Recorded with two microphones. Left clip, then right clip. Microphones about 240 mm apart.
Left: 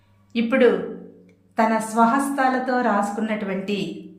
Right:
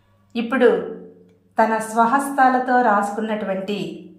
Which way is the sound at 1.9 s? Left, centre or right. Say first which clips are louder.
Right 2 dB; centre.